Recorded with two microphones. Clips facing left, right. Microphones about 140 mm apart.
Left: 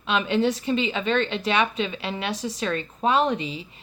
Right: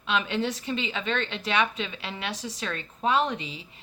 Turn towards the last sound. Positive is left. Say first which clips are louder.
# left 4 dB
turn(degrees=25)  # may be behind; listen again after turning